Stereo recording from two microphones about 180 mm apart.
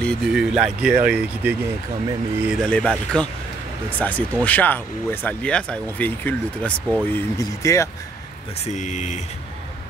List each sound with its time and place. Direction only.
0.0 s speech: centre (ahead or behind)
2.6 s speech: 5° left (ahead or behind)
8.6 s speech: 40° left (ahead or behind)